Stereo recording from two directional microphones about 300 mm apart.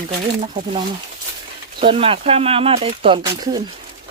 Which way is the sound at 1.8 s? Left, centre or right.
Centre.